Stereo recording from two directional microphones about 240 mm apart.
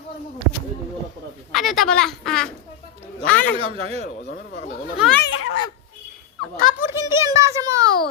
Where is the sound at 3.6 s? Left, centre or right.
Right.